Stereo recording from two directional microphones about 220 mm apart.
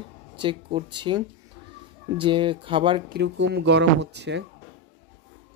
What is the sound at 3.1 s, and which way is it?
Speech, 55° right (ahead or behind).